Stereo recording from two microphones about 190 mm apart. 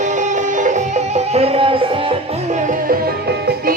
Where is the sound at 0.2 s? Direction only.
40° right (ahead or behind).